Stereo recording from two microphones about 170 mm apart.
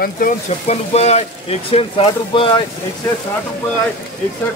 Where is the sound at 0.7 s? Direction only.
40° left (ahead or behind).